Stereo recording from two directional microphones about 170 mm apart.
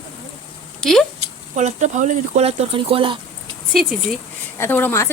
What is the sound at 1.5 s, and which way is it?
Speech, 45° right (ahead or behind).